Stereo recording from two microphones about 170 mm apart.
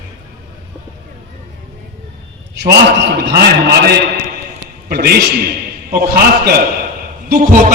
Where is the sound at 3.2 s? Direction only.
70° right (ahead or behind).